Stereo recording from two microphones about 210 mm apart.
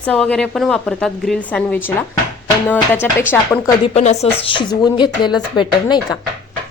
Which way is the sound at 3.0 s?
5° left (ahead or behind).